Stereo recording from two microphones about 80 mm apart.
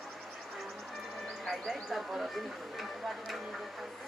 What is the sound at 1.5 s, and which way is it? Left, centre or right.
Speech, centre.